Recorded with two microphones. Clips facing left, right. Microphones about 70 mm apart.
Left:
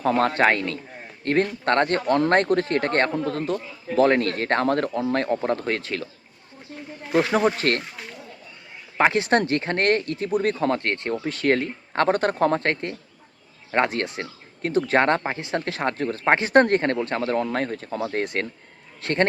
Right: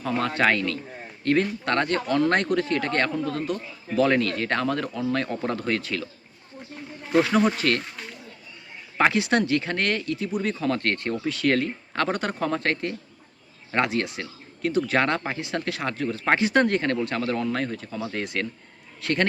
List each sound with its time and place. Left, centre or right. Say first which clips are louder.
0.0 s speech: left 4 dB; left
7.1 s speech: even; centre
7.6 s speech: left 1 dB; left
9.1 s speech: left 2 dB; left
10.7 s speech: left 1 dB; left